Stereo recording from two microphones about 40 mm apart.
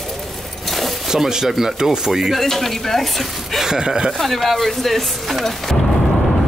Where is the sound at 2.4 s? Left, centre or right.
Centre.